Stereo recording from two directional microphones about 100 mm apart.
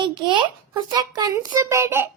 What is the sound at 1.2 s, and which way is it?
Speech, 40° right (ahead or behind).